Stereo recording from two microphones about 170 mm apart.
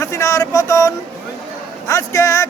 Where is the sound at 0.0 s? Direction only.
20° left (ahead or behind).